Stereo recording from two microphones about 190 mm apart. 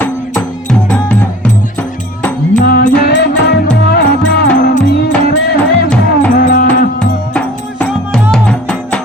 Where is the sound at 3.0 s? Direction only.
65° left (ahead or behind).